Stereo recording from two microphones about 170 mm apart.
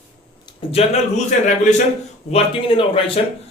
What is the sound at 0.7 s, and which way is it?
A man's voice, 40° left (ahead or behind).